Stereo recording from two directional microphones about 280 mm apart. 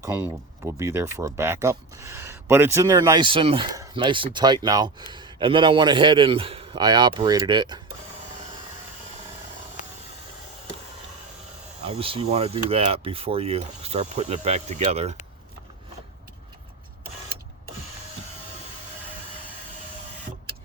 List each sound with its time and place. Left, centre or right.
0.0 s speech: centre
11.8 s speech: centre